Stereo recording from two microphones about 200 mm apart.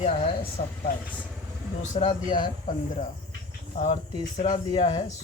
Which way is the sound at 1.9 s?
30° left (ahead or behind).